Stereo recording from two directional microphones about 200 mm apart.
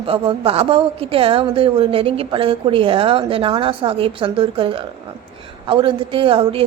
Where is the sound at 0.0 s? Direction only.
25° right (ahead or behind).